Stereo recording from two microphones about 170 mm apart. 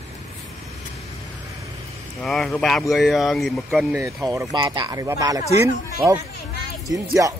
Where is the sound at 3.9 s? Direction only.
20° right (ahead or behind).